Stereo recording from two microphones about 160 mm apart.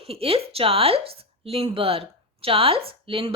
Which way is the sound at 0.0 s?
35° right (ahead or behind).